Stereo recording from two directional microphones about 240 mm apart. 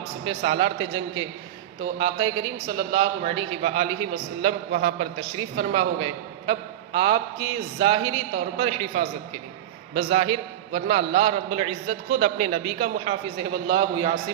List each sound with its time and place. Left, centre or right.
0.3 s a man's voice: right